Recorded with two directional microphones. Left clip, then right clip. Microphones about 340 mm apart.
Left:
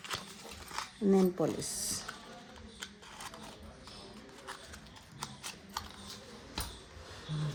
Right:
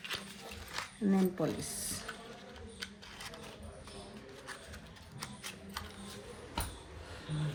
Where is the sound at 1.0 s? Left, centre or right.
Centre.